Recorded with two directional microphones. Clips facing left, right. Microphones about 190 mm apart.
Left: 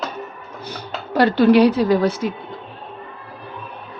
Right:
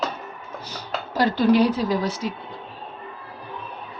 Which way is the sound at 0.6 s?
60° left (ahead or behind).